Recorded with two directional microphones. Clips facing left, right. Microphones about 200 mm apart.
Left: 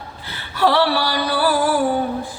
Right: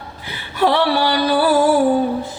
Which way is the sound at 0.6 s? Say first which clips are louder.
Right 1 dB; 20° right (ahead or behind).